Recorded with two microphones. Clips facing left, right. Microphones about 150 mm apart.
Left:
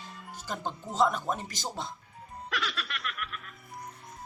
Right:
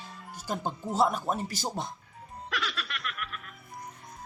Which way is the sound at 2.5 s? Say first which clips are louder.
Even; centre (ahead or behind).